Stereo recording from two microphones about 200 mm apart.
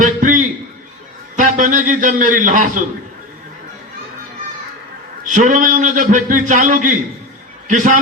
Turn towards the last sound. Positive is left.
turn(degrees=-40)  # may be behind; listen again after turning